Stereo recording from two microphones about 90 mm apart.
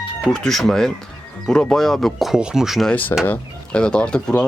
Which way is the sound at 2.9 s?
20° left (ahead or behind).